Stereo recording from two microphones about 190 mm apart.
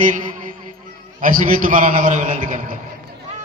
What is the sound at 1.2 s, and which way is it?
A man's voice, 45° right (ahead or behind).